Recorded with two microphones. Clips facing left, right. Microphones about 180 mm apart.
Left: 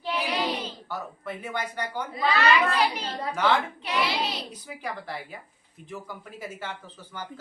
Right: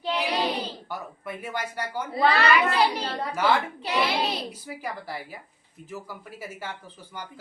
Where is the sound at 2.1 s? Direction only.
35° right (ahead or behind).